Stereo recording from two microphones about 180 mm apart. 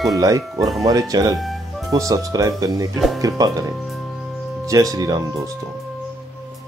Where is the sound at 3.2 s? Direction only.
20° right (ahead or behind).